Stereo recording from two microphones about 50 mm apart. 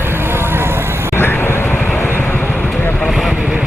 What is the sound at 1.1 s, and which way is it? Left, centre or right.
Vehicle, left.